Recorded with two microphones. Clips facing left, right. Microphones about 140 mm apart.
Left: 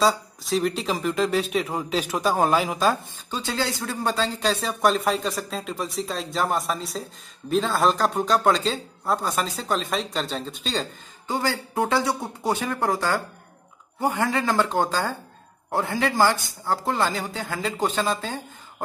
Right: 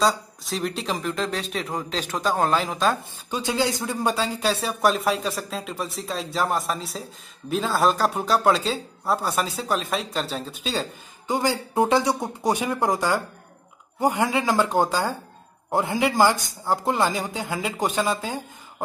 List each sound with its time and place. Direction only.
0.0 s speech: centre (ahead or behind)
3.3 s speech: 15° right (ahead or behind)
11.2 s speech: 15° right (ahead or behind)